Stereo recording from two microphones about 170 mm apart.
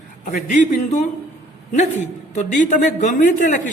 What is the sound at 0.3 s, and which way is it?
Speech, 50° left (ahead or behind).